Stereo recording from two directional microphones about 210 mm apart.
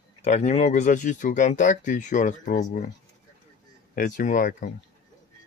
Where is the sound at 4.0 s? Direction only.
40° left (ahead or behind).